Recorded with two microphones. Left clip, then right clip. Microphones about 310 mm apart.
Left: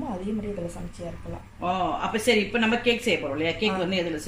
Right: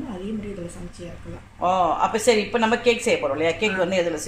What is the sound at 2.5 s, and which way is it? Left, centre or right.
A woman's voice, centre.